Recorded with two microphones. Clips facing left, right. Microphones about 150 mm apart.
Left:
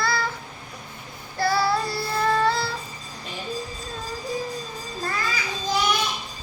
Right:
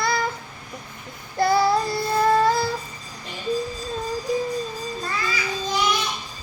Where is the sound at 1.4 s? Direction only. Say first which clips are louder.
Right 4 dB; 20° right (ahead or behind).